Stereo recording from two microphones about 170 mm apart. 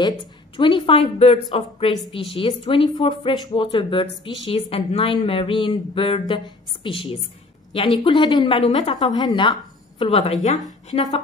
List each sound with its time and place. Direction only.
0.6 s a woman's voice: 30° left (ahead or behind)